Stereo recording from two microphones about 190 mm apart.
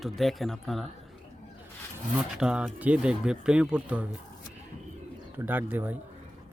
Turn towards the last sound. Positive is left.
turn(degrees=-10)  # may be behind; listen again after turning